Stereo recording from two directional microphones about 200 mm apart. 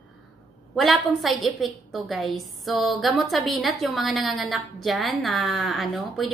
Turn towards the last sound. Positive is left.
turn(degrees=0)  # may be behind; listen again after turning